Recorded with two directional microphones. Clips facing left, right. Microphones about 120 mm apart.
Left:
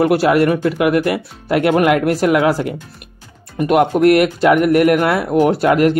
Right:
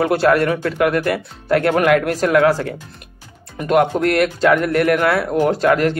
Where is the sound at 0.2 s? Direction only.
15° left (ahead or behind).